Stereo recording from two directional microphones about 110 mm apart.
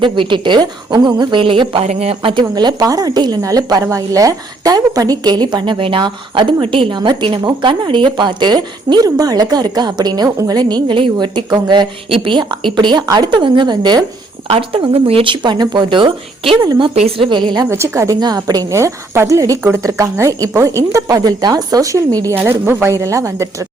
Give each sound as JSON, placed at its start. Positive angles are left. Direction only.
{"t": 0.0, "sound": "speech", "side_deg": -50}
{"t": 1.8, "sound": "a woman's voice", "side_deg": -75}
{"t": 14.4, "sound": "speech", "side_deg": -60}
{"t": 16.9, "sound": "a woman's voice", "side_deg": -65}
{"t": 17.2, "sound": "a woman's voice", "side_deg": -45}
{"t": 17.7, "sound": "a woman's voice", "side_deg": -25}
{"t": 22.4, "sound": "a woman's voice", "side_deg": -20}